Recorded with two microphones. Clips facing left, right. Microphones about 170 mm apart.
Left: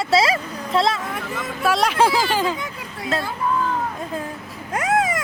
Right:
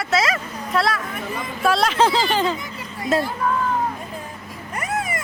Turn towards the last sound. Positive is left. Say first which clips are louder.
# left 6 dB
turn(degrees=90)